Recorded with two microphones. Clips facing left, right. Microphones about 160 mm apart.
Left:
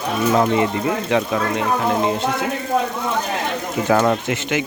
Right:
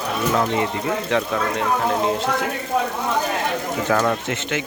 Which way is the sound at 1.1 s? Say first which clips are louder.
Left 2 dB; 5° left (ahead or behind).